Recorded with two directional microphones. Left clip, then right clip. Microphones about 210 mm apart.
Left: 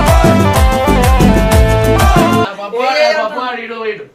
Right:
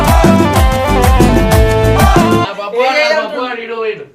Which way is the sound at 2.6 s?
30° right (ahead or behind).